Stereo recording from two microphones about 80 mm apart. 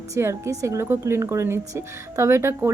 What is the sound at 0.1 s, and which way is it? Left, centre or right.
A woman's voice, right.